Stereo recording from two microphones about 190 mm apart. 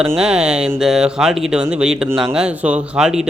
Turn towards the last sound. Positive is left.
turn(degrees=-5)  # may be behind; listen again after turning